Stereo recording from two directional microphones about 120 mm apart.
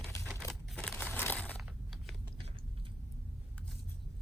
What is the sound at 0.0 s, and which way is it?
Crumpling, centre (ahead or behind).